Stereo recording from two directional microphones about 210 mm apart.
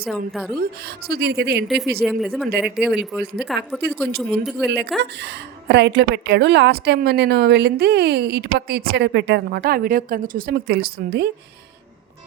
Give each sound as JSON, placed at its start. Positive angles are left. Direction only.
{"t": 0.6, "sound": "a woman's voice", "side_deg": -50}
{"t": 1.6, "sound": "speech", "side_deg": 0}
{"t": 2.5, "sound": "a woman's voice", "side_deg": -50}
{"t": 2.7, "sound": "speech", "side_deg": -5}
{"t": 4.9, "sound": "a woman's voice", "side_deg": -55}